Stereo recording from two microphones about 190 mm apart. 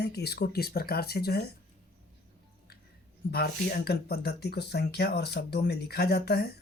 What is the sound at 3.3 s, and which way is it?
Speech, 55° left (ahead or behind).